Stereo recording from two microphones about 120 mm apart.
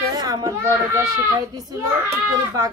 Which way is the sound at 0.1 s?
30° right (ahead or behind).